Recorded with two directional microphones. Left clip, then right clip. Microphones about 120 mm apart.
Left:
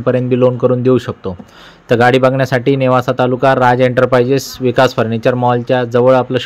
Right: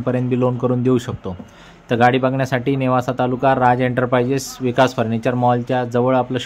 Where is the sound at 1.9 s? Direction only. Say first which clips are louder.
Left 6 dB; 40° left (ahead or behind).